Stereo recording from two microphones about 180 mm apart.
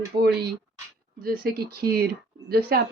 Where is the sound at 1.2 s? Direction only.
55° right (ahead or behind).